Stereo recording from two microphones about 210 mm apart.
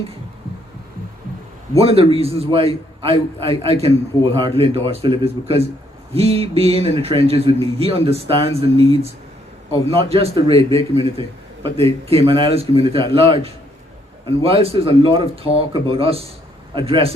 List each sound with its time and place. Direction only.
1.8 s a man's voice: 30° right (ahead or behind)